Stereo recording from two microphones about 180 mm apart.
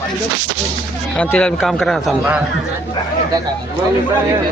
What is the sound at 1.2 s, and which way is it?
A man's voice, 5° left (ahead or behind).